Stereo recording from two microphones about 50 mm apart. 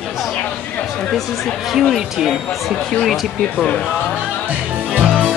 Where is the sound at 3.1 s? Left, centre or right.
Centre.